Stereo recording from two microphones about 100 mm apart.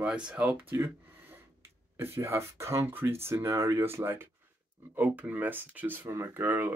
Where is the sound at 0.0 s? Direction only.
10° right (ahead or behind).